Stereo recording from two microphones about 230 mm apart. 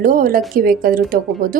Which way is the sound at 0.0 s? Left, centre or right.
Right.